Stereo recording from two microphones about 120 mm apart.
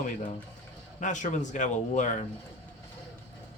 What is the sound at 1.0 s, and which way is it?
Speech, 90° left.